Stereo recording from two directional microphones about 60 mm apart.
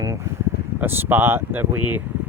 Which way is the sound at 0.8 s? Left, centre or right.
Right.